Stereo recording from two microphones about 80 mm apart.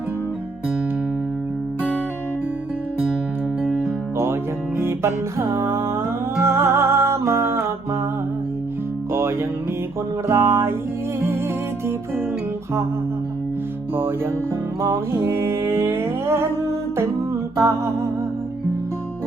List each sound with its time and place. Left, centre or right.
4.8 s music: right
9.1 s music: right
14.8 s music: right